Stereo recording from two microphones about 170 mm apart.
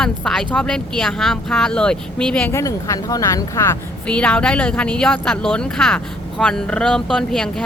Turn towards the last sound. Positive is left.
turn(degrees=5)  # may be behind; listen again after turning